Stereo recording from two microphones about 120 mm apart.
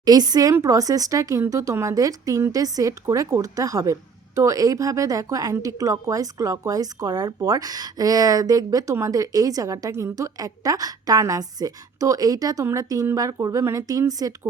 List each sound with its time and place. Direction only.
0.0 s a woman's voice: 35° right (ahead or behind)